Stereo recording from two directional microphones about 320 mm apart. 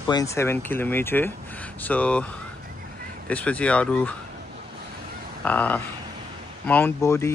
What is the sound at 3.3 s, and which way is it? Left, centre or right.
Speech, centre.